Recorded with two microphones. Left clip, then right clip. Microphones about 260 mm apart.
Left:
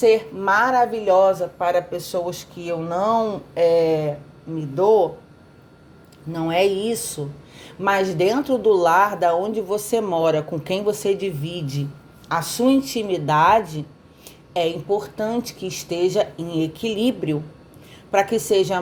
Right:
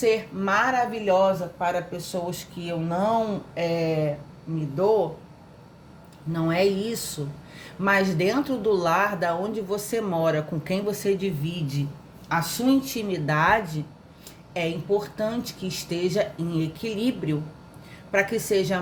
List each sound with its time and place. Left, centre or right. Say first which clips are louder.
0.0 s speech: left 6 dB; left
6.3 s speech: left 4 dB; left